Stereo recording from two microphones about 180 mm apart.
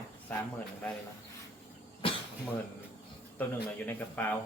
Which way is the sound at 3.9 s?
10° left (ahead or behind).